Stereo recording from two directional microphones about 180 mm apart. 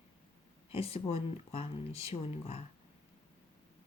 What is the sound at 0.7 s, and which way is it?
Speech, 35° left (ahead or behind).